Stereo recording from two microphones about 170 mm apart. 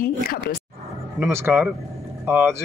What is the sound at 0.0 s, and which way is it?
Speech, 60° left (ahead or behind).